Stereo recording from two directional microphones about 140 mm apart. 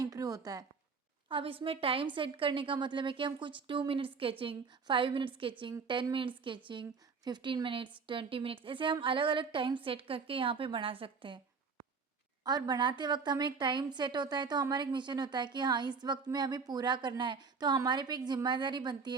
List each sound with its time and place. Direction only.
0.0 s speech: 25° right (ahead or behind)
1.3 s speech: 40° right (ahead or behind)
12.4 s speech: 30° right (ahead or behind)